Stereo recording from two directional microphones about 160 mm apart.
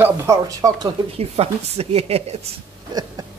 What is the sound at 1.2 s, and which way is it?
Speech, 40° right (ahead or behind).